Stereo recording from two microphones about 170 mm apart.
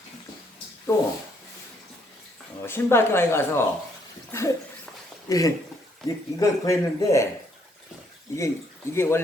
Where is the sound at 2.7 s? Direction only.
15° left (ahead or behind).